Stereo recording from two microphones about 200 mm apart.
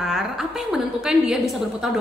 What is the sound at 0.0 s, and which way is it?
A woman's voice, 5° right (ahead or behind).